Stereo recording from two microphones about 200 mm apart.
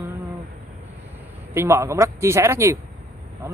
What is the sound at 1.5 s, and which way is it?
Speech, 10° right (ahead or behind).